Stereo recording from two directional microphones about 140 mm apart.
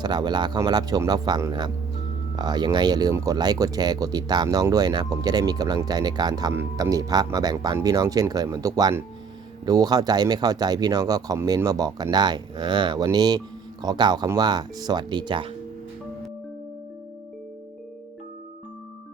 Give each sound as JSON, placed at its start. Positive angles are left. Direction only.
{"t": 0.0, "sound": "speech", "side_deg": -30}
{"t": 6.5, "sound": "speech", "side_deg": -15}